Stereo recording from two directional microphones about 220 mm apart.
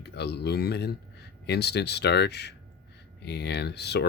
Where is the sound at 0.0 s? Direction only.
50° left (ahead or behind).